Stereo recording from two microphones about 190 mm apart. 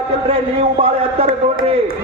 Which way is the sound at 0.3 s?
30° right (ahead or behind).